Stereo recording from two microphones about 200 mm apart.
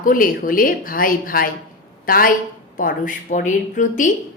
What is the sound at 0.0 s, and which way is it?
A woman's voice, 45° left (ahead or behind).